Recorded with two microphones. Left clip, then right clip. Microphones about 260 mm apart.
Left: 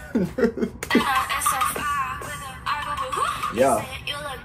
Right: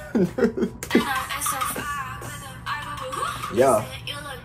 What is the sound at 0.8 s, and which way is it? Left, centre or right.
Music, left.